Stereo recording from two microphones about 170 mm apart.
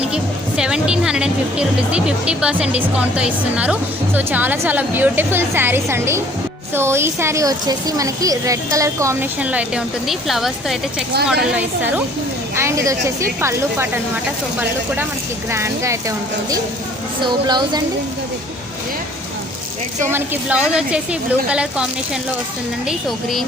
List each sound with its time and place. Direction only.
0.1 s speech: 5° right (ahead or behind)
15.4 s speech: 15° right (ahead or behind)
20.1 s a woman's voice: 10° right (ahead or behind)